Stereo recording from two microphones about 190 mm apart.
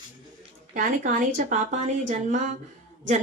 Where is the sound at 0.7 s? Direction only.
45° right (ahead or behind).